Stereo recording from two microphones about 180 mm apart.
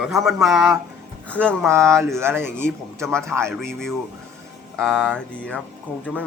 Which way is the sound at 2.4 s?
5° left (ahead or behind).